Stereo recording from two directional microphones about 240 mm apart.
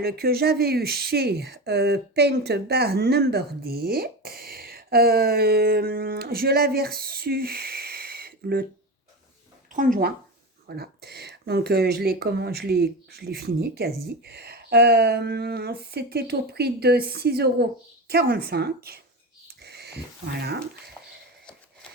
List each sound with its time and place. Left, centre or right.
0.0 s speech: right
9.7 s speech: right
19.6 s a sound: right